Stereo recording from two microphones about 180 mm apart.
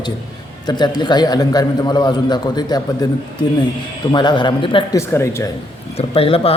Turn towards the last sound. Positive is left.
turn(degrees=30)  # may be behind; listen again after turning